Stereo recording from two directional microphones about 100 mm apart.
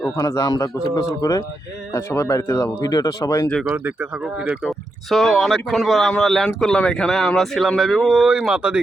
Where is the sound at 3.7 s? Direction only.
20° right (ahead or behind).